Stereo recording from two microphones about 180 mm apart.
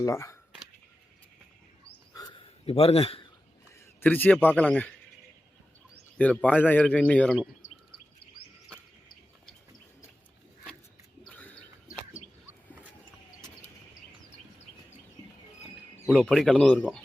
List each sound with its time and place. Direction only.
0.0 s a man's voice: 15° left (ahead or behind)
2.1 s a sound: 25° left (ahead or behind)
4.0 s a man's voice: 10° left (ahead or behind)
6.1 s a man's voice: 10° left (ahead or behind)
16.0 s speech: 5° left (ahead or behind)